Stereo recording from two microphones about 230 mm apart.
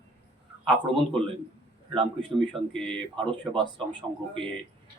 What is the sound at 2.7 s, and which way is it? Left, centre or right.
Speech, centre.